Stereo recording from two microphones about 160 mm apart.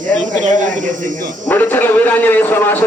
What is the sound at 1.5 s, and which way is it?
Speech, 15° left (ahead or behind).